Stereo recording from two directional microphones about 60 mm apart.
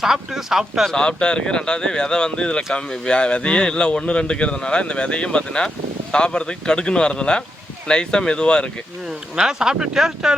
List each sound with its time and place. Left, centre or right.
0.0 s speech: centre
0.9 s a man's voice: centre
9.3 s speech: centre